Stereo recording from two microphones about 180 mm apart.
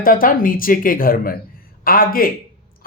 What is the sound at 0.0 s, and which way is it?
Speech, 50° left (ahead or behind).